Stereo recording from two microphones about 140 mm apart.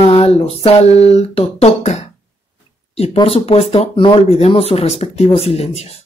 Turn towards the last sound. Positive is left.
turn(degrees=50)  # may be behind; listen again after turning